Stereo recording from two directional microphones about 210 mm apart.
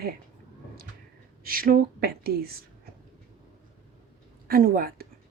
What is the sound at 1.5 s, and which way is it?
Speech, 45° right (ahead or behind).